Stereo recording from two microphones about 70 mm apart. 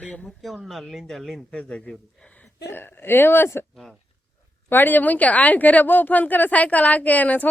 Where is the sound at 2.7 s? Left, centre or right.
Left.